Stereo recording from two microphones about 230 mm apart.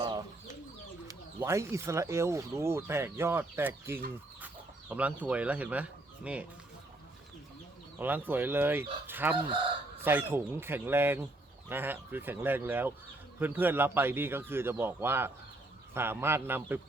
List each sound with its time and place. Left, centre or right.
0.0 s chicken: centre
1.0 s speech: centre
4.4 s chicken: centre
7.9 s speech: centre